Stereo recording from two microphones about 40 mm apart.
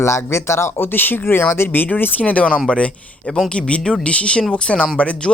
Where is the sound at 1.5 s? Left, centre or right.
Left.